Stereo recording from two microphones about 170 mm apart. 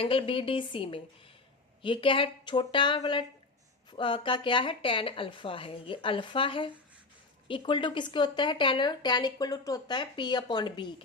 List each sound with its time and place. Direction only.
0.0 s speech: 30° left (ahead or behind)